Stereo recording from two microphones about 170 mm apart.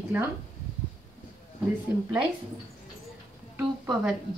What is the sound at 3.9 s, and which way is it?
Speech, 5° right (ahead or behind).